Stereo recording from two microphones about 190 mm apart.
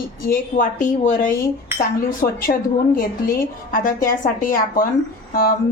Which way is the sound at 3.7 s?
45° left (ahead or behind).